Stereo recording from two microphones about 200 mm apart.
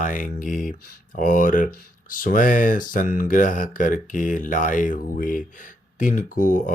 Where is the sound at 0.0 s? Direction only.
40° left (ahead or behind).